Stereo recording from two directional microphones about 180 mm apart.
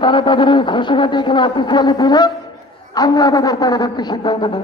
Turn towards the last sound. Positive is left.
turn(degrees=25)  # may be behind; listen again after turning